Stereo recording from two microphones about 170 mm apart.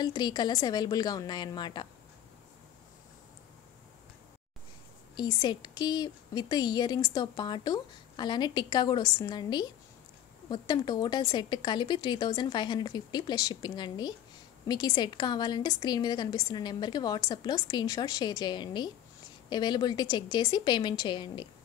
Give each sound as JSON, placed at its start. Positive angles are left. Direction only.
{"t": 0.0, "sound": "a woman's voice", "side_deg": 25}
{"t": 5.1, "sound": "a woman's voice", "side_deg": 25}